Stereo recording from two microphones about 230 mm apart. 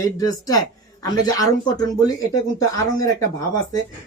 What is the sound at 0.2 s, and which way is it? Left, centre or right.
Speech, centre.